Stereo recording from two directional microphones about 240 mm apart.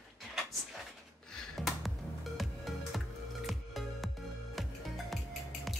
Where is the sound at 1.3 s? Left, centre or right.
Centre.